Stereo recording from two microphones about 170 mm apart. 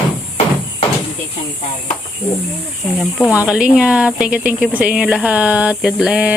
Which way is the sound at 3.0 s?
10° left (ahead or behind).